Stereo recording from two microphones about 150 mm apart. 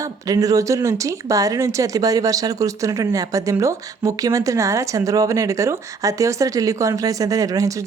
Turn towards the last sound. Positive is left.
turn(degrees=-20)  # may be behind; listen again after turning